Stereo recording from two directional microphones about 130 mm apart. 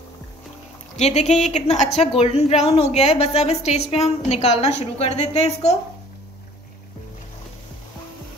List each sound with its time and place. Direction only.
0.9 s a woman's voice: 60° left (ahead or behind)